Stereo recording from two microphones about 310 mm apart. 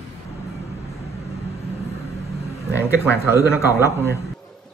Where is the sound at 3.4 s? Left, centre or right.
Centre.